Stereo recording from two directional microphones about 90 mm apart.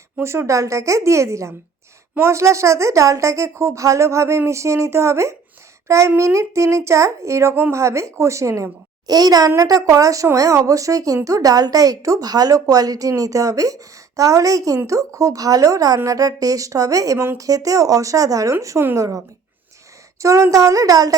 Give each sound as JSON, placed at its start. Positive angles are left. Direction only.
{"t": 0.2, "sound": "a child's voice", "side_deg": -30}
{"t": 20.2, "sound": "a child's voice", "side_deg": -35}